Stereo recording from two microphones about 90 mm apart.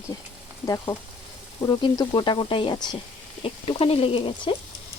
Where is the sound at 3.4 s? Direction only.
85° left.